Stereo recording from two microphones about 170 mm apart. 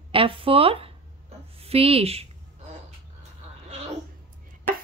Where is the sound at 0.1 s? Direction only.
30° right (ahead or behind).